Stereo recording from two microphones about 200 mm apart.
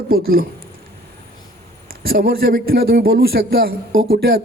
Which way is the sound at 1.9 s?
50° right (ahead or behind).